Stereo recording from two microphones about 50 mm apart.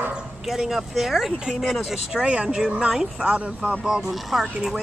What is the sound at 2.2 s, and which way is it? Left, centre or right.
Speech, centre.